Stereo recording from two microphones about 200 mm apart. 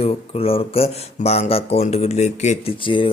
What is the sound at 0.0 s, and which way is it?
Speech, 30° left (ahead or behind).